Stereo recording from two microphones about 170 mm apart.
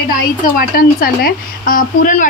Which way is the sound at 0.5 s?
60° left (ahead or behind).